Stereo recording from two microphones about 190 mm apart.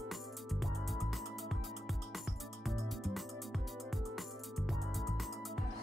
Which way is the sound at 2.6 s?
Centre (ahead or behind).